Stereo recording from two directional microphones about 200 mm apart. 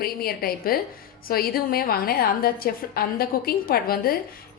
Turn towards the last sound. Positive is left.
turn(degrees=50)  # may be behind; listen again after turning